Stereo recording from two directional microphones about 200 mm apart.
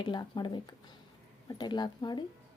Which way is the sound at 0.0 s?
20° left (ahead or behind).